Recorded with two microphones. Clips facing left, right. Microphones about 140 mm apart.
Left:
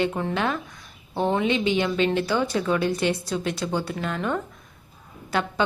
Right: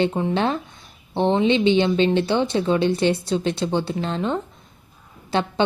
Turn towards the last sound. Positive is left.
turn(degrees=-25)  # may be behind; listen again after turning